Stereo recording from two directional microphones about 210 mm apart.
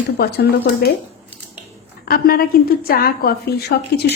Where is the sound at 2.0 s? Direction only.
45° left (ahead or behind).